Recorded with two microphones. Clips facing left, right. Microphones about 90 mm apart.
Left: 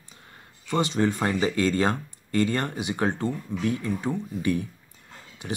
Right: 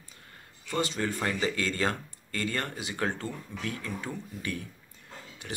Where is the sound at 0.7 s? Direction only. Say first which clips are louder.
Left 6 dB; 20° left (ahead or behind).